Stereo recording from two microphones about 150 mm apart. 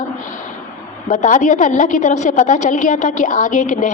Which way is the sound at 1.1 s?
60° left (ahead or behind).